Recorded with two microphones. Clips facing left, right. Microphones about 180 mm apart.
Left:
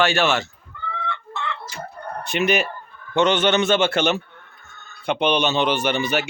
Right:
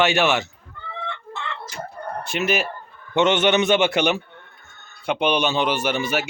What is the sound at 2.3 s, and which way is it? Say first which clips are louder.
Speech: left 3 dB; 5° right (ahead or behind).